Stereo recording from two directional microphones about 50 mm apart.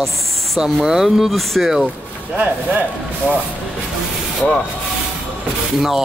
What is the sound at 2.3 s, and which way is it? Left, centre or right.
Speech, right.